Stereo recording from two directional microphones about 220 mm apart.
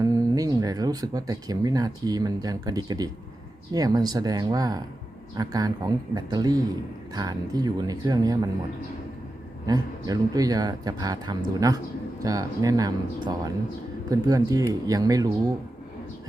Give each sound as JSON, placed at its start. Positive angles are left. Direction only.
{"t": 0.0, "sound": "speech", "side_deg": -15}
{"t": 9.6, "sound": "speech", "side_deg": -15}